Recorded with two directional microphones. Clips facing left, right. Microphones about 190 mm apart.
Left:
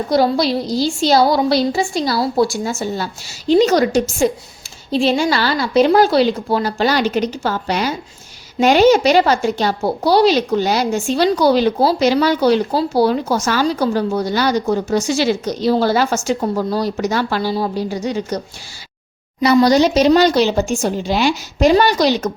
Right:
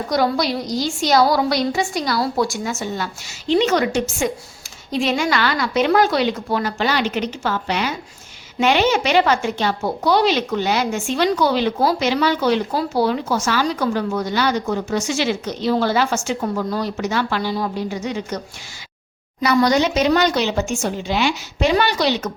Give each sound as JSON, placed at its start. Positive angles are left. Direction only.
{"t": 0.1, "sound": "a woman's voice", "side_deg": 30}